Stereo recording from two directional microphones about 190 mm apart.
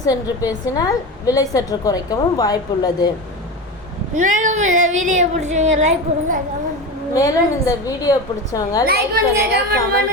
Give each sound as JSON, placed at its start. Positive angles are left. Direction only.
{"t": 0.0, "sound": "a woman's voice", "side_deg": 20}
{"t": 4.1, "sound": "speech", "side_deg": -40}
{"t": 7.1, "sound": "a woman's voice", "side_deg": 20}
{"t": 8.9, "sound": "a woman's voice", "side_deg": -55}